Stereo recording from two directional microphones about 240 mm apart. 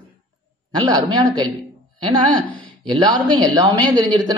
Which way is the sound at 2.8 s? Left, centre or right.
Centre.